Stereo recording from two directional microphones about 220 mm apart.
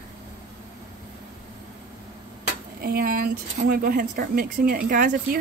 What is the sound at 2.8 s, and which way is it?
A woman's voice, 45° right (ahead or behind).